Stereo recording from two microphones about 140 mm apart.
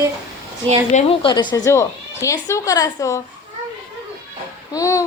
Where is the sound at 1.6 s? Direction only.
20° left (ahead or behind).